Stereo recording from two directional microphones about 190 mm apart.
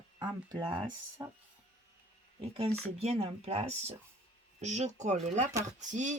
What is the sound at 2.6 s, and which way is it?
Speech, 30° right (ahead or behind).